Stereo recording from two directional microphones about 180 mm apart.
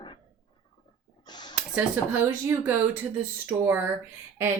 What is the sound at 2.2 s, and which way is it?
A woman's voice, 15° right (ahead or behind).